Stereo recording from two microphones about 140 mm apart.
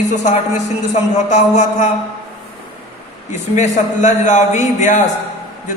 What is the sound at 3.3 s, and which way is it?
Speech, 60° left (ahead or behind).